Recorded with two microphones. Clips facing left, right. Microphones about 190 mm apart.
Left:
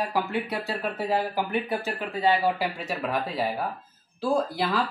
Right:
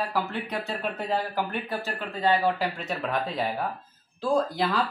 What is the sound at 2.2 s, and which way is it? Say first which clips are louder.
Speech: even; 5° left (ahead or behind).